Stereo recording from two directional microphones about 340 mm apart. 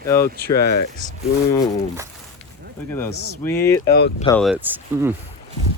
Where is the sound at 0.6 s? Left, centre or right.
Left.